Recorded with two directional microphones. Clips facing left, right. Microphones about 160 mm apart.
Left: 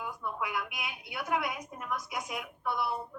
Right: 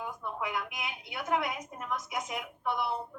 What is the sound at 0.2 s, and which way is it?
A woman's voice, 25° right (ahead or behind).